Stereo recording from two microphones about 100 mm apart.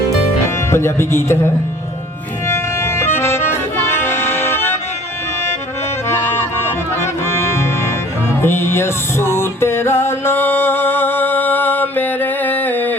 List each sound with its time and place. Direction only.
0.7 s speech: 25° left (ahead or behind)
2.5 s music: 25° left (ahead or behind)
6.9 s music: 25° left (ahead or behind)